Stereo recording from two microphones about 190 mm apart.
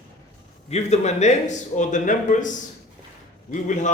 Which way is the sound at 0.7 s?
35° left (ahead or behind).